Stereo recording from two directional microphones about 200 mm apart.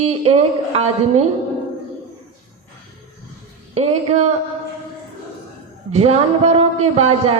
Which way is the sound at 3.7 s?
30° right (ahead or behind).